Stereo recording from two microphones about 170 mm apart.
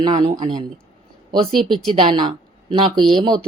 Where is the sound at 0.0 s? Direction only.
25° right (ahead or behind).